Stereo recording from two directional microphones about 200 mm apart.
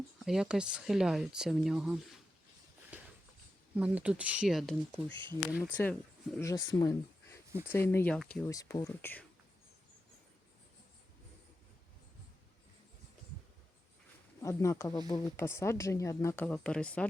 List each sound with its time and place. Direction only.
0.3 s speech: centre (ahead or behind)
2.9 s a sound: 5° right (ahead or behind)
3.8 s speech: 5° right (ahead or behind)
5.1 s speech: 25° right (ahead or behind)
5.7 s speech: 5° left (ahead or behind)
8.4 s speech: 15° left (ahead or behind)
14.4 s speech: 15° left (ahead or behind)